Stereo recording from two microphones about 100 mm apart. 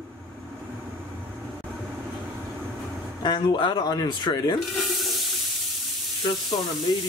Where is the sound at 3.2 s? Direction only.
50° left (ahead or behind).